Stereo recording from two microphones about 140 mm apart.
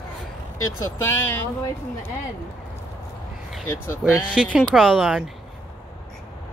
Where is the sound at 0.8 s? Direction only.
20° left (ahead or behind).